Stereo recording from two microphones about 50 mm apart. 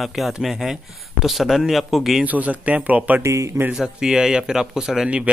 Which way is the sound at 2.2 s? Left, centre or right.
Right.